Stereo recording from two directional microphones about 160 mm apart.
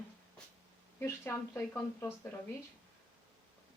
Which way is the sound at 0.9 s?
15° left (ahead or behind).